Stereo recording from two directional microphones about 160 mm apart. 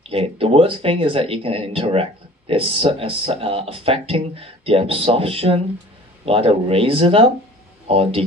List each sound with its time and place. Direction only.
0.0 s speech: 35° right (ahead or behind)